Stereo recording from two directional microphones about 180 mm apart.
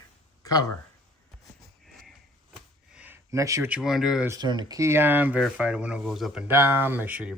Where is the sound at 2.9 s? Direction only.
10° right (ahead or behind).